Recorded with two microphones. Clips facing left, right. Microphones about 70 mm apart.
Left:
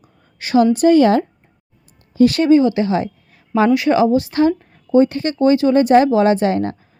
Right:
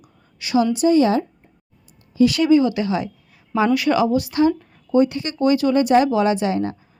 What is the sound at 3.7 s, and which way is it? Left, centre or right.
Speech, left.